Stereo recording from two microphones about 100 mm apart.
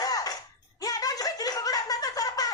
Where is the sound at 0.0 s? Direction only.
40° left (ahead or behind).